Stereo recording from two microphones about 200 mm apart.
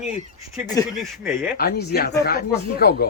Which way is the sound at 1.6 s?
50° left (ahead or behind).